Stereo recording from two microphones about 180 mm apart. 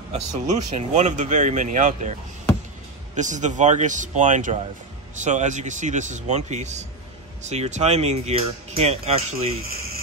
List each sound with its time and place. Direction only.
0.1 s speech: 40° right (ahead or behind)
3.2 s a man's voice: 40° right (ahead or behind)